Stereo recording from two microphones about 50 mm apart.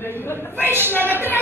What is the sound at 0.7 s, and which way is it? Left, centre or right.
Speech, right.